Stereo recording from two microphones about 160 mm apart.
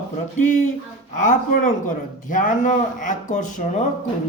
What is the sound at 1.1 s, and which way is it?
Speech, 50° left (ahead or behind).